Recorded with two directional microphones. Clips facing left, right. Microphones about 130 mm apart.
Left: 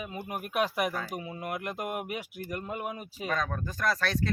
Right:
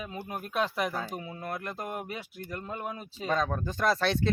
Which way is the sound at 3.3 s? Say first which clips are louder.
Right 4 dB; 25° right (ahead or behind).